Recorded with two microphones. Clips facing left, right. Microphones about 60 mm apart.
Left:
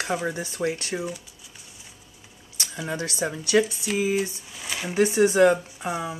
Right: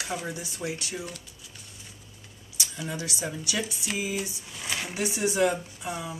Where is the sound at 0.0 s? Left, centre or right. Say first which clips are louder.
Left 6 dB; left.